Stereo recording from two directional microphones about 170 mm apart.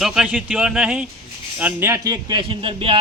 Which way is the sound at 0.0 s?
5° right (ahead or behind).